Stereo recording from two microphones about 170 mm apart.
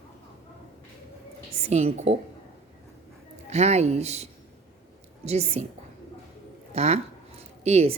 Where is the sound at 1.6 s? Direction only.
40° right (ahead or behind).